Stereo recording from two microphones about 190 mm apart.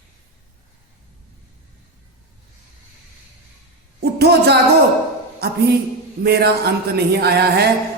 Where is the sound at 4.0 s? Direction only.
60° right (ahead or behind).